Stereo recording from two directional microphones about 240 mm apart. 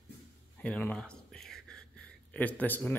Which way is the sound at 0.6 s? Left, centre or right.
Centre.